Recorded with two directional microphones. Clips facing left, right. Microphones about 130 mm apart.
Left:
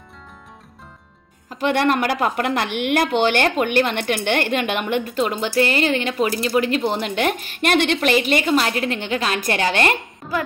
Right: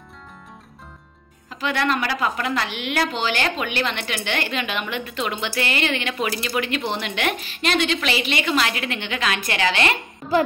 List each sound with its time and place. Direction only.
1.5 s a woman's voice: 50° left (ahead or behind)